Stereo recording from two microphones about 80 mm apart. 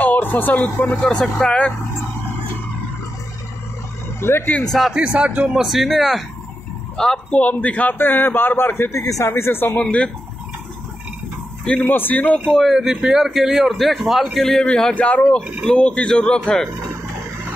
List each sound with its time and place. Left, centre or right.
0.0 s speech: left
1.0 s speech: centre
4.2 s speech: left
4.9 s a man's voice: centre
5.5 s a man's voice: centre
7.0 s a man's voice: centre; by 9.8 s left
9.8 s speech: centre
11.6 s a man's voice: centre
12.4 s a man's voice: centre
12.7 s a man's voice: centre
15.0 s a man's voice: centre